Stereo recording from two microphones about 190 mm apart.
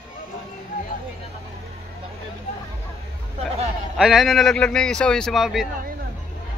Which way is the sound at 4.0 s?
Centre (ahead or behind).